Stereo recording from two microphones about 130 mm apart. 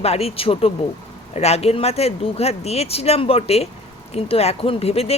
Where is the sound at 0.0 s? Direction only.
50° left (ahead or behind).